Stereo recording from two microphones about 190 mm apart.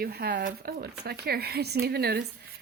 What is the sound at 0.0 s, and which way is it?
Speech, 55° right (ahead or behind).